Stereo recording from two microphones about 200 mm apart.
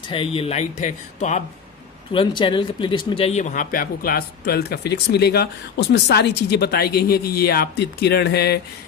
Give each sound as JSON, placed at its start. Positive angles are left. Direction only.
{"t": 0.1, "sound": "speech", "side_deg": 25}
{"t": 2.4, "sound": "speech", "side_deg": 25}